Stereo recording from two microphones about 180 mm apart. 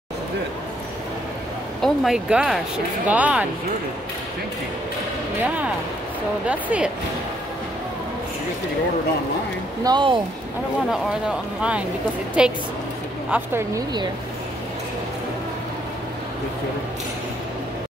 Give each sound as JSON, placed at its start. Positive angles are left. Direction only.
{"t": 1.8, "sound": "speech", "side_deg": 0}
{"t": 6.4, "sound": "speech", "side_deg": -5}
{"t": 9.8, "sound": "speech", "side_deg": -25}
{"t": 10.9, "sound": "speech", "side_deg": -5}